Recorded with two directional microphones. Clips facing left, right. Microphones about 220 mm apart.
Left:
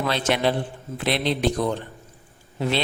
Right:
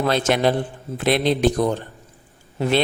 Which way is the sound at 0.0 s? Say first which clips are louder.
Right 4 dB; 45° right (ahead or behind).